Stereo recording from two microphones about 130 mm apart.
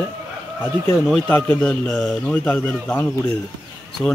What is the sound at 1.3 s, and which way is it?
Speech, 15° left (ahead or behind).